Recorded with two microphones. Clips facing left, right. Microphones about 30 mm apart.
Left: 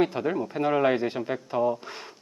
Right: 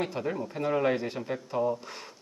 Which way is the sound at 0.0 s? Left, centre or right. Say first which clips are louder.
Left 6 dB; centre.